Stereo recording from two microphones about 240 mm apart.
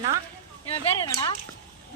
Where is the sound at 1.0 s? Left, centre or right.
Centre.